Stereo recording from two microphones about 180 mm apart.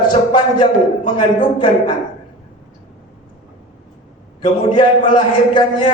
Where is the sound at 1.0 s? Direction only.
25° left (ahead or behind).